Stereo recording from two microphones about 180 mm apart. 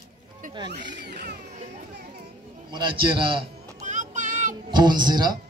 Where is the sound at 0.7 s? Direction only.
75° right (ahead or behind).